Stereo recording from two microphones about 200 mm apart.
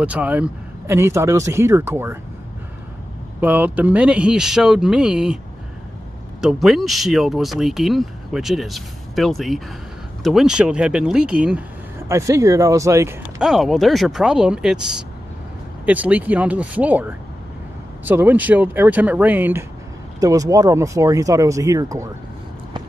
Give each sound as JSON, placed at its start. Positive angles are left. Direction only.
{"t": 0.0, "sound": "speech", "side_deg": -5}
{"t": 3.3, "sound": "speech", "side_deg": -10}
{"t": 6.4, "sound": "speech", "side_deg": 0}
{"t": 13.4, "sound": "speech", "side_deg": 0}